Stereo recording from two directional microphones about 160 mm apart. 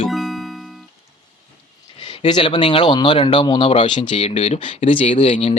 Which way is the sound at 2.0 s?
30° left (ahead or behind).